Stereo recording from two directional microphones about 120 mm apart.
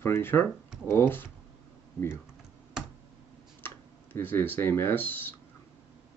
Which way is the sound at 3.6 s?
15° left (ahead or behind).